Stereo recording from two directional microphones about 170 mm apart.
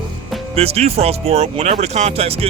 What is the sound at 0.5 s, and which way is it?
Speech, 35° right (ahead or behind).